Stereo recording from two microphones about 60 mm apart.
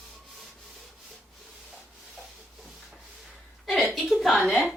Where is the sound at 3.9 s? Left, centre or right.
Centre.